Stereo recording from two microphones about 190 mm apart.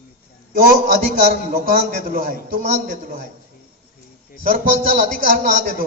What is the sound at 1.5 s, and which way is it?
A man's voice, 45° right (ahead or behind).